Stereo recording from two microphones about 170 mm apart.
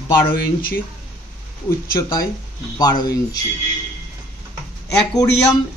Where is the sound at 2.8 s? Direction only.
25° left (ahead or behind).